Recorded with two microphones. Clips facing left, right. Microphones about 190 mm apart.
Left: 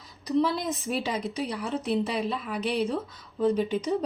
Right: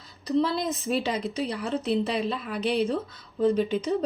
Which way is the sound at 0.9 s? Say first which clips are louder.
Right 3 dB; 10° left (ahead or behind).